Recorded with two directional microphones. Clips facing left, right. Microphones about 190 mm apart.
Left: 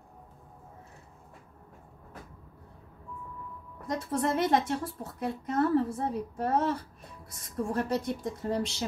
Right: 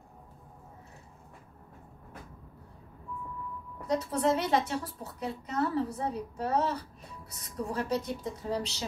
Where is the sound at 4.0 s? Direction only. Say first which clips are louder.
Left 2 dB; 50° left (ahead or behind).